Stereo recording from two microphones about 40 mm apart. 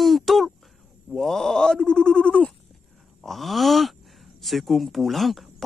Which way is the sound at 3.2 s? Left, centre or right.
Centre.